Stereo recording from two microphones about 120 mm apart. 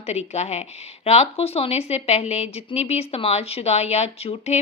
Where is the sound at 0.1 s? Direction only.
65° left (ahead or behind).